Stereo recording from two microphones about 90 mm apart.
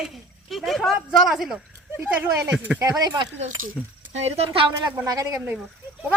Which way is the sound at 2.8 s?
45° right (ahead or behind).